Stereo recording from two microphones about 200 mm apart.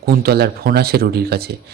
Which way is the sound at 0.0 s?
50° right (ahead or behind).